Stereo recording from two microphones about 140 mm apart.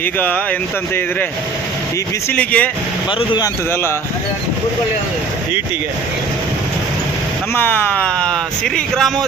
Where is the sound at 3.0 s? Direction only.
35° left (ahead or behind); by 4.0 s 15° left (ahead or behind).